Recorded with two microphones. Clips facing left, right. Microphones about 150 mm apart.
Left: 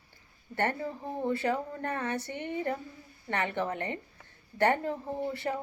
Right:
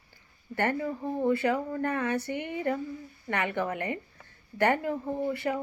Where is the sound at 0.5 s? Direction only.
25° left (ahead or behind).